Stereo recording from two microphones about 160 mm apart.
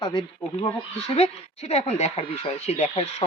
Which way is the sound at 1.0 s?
40° left (ahead or behind).